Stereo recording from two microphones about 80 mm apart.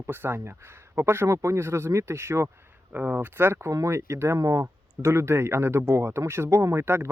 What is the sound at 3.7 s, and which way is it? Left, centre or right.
Speech, right.